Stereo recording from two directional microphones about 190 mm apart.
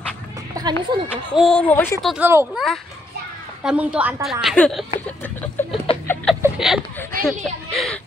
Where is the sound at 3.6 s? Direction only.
5° right (ahead or behind).